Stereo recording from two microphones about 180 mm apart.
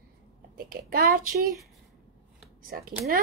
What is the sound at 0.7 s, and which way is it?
Speech, 55° right (ahead or behind).